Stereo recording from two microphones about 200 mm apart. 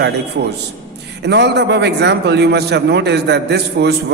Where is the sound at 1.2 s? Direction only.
60° right (ahead or behind).